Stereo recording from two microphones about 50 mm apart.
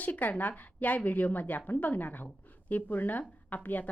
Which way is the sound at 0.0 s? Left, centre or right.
Left.